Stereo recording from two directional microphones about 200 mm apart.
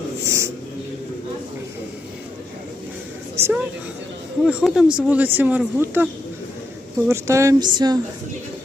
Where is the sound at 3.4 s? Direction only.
10° right (ahead or behind).